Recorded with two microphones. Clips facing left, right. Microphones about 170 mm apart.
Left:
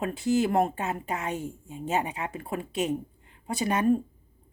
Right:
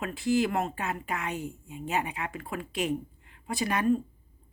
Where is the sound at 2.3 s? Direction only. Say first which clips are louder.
Left 3 dB; 30° left (ahead or behind).